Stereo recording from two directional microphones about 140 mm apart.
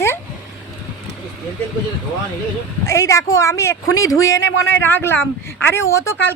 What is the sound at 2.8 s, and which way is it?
Speech, 20° left (ahead or behind).